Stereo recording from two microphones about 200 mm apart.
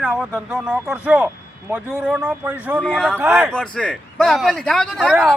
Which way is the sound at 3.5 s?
5° left (ahead or behind).